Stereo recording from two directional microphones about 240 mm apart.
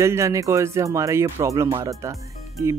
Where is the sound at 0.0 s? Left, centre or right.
Centre.